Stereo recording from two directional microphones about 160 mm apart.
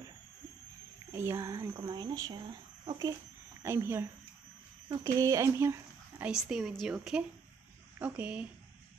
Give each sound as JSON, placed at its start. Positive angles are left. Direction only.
{"t": 1.1, "sound": "speech", "side_deg": -15}
{"t": 3.6, "sound": "a woman's voice", "side_deg": -15}